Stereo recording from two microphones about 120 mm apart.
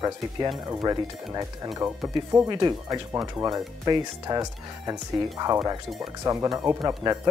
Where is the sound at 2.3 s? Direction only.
35° right (ahead or behind).